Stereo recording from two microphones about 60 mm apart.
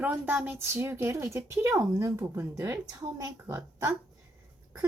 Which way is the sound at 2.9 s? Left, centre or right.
Right.